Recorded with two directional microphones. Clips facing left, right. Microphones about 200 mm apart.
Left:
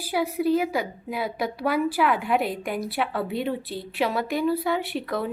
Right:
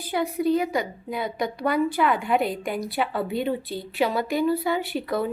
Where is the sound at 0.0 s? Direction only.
5° left (ahead or behind).